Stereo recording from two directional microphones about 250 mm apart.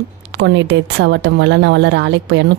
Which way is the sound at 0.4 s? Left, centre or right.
Right.